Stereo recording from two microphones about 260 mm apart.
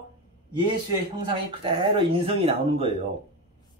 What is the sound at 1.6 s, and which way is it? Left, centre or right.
Speech, centre.